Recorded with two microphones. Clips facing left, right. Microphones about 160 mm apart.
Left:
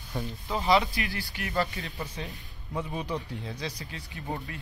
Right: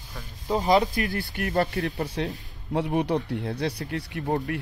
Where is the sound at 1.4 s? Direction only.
55° right (ahead or behind).